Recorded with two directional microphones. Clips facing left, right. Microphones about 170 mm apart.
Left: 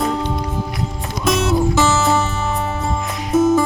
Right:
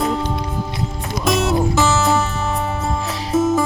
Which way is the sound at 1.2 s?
Centre (ahead or behind).